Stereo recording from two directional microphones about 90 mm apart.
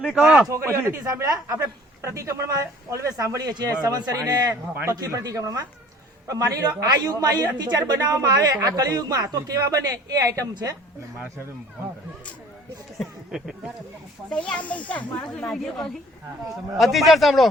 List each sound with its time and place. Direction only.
0.2 s speech: 15° right (ahead or behind)
0.4 s speech: 30° right (ahead or behind)
4.7 s speech: 25° right (ahead or behind)
4.9 s a man's voice: 45° right (ahead or behind)
10.5 s a man's voice: 50° right (ahead or behind)
13.0 s speech: centre (ahead or behind)
14.3 s speech: 10° left (ahead or behind)
15.4 s a man's voice: 5° left (ahead or behind)